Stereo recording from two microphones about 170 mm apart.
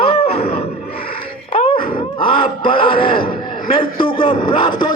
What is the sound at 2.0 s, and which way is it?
Groan, 30° left (ahead or behind).